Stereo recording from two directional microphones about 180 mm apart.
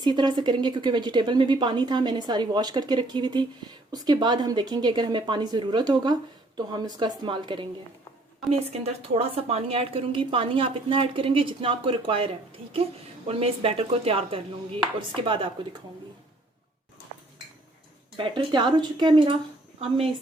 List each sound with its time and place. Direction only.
0.0 s a woman's voice: 25° right (ahead or behind)
18.2 s a woman's voice: 25° right (ahead or behind)